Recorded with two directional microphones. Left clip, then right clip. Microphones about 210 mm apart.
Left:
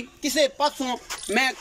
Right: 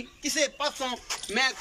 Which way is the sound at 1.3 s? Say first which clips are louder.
Left 4 dB; 40° left (ahead or behind).